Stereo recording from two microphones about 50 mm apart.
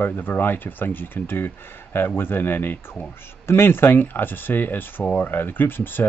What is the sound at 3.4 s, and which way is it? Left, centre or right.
Speech, left.